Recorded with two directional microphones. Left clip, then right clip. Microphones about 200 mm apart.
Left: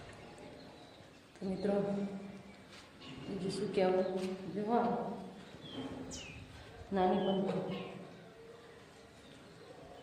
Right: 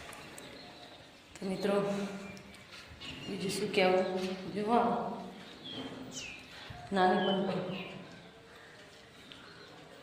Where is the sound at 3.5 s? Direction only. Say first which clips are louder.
Right 4 dB; 15° right (ahead or behind).